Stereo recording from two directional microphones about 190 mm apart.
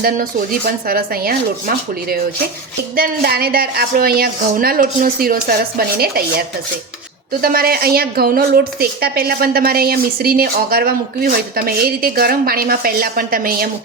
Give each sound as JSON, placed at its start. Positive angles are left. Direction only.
{"t": 0.0, "sound": "a woman's voice", "side_deg": -50}
{"t": 7.4, "sound": "a woman's voice", "side_deg": -50}